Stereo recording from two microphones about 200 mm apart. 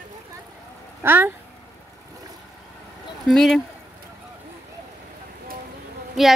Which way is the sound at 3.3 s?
Centre (ahead or behind).